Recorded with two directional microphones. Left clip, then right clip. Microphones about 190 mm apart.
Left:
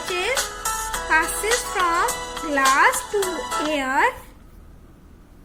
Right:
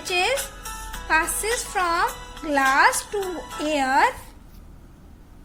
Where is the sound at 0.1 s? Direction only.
15° right (ahead or behind).